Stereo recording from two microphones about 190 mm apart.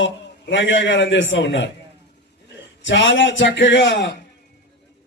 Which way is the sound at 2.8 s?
75° left (ahead or behind).